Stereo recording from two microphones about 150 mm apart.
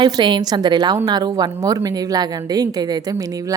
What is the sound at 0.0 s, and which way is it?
A woman's voice, 30° right (ahead or behind).